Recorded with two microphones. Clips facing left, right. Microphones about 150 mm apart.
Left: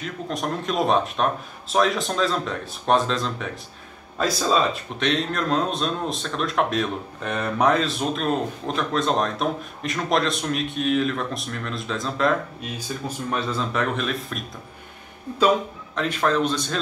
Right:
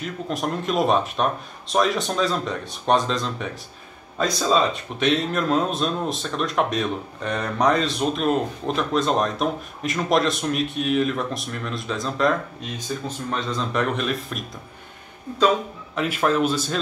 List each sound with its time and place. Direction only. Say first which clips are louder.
0.3 s speech: right 2 dB; centre (ahead or behind)
15.9 s speech: right 1 dB; 5° right (ahead or behind)